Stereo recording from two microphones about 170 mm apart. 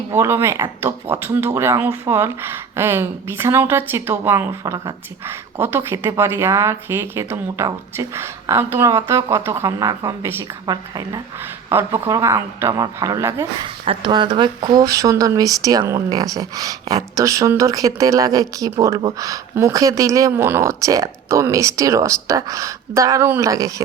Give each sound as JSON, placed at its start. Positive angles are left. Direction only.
{"t": 0.1, "sound": "speech", "side_deg": -15}
{"t": 13.8, "sound": "speech", "side_deg": -30}